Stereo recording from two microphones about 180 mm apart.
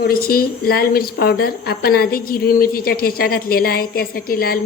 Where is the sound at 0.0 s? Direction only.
55° left (ahead or behind).